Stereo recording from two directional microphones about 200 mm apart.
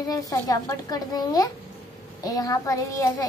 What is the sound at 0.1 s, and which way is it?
A woman's voice, 15° left (ahead or behind).